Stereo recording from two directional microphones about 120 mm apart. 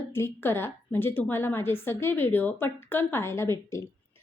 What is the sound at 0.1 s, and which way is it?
A woman's voice, 20° left (ahead or behind).